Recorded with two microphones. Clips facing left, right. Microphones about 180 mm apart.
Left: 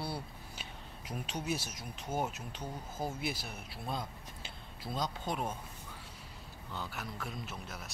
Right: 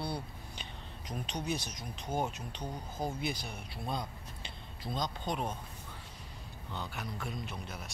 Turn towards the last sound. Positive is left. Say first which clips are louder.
# right 2 dB
turn(degrees=0)  # may be behind; listen again after turning